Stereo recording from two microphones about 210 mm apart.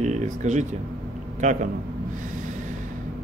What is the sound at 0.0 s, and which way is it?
Speech, 35° right (ahead or behind).